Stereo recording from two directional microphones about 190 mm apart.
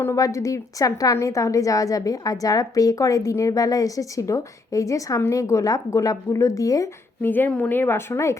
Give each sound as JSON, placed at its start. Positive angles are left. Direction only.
{"t": 0.0, "sound": "a woman's voice", "side_deg": 15}